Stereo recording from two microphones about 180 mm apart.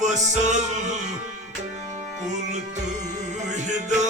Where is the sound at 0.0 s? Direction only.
40° right (ahead or behind).